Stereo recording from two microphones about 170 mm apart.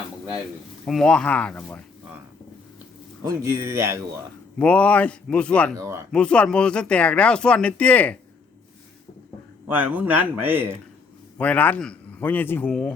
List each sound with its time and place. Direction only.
0.9 s speech: 5° left (ahead or behind)
3.2 s a man's voice: 15° right (ahead or behind)
4.5 s speech: 5° left (ahead or behind)
5.8 s a man's voice: 15° right (ahead or behind)
6.1 s speech: 5° left (ahead or behind)
9.6 s a man's voice: 10° right (ahead or behind)
11.3 s speech: 10° left (ahead or behind)